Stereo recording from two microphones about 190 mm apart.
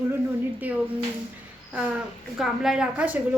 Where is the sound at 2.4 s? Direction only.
Centre (ahead or behind).